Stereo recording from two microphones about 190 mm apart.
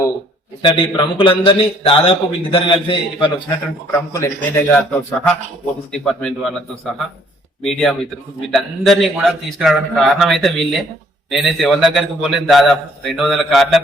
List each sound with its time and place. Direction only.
0.6 s a man's voice: 25° left (ahead or behind)
4.1 s a man's voice: 10° left (ahead or behind)
7.6 s a man's voice: 5° left (ahead or behind)